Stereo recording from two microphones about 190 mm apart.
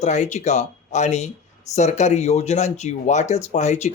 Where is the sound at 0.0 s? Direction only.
35° left (ahead or behind).